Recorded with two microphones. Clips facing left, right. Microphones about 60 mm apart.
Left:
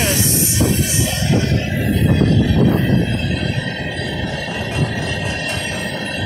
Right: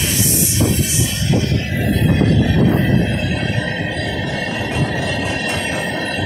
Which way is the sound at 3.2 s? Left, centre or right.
Centre.